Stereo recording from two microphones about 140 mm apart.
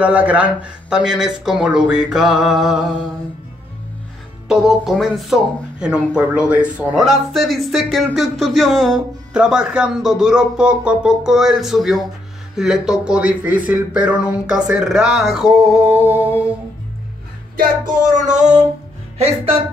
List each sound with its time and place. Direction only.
0.0 s speech: 10° right (ahead or behind)
4.5 s speech: 5° right (ahead or behind)
15.8 s a sound: 15° right (ahead or behind)
17.6 s music: 65° right (ahead or behind)
19.1 s speech: 45° right (ahead or behind)